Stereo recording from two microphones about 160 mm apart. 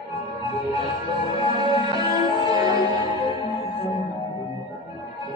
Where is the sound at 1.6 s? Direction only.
30° right (ahead or behind).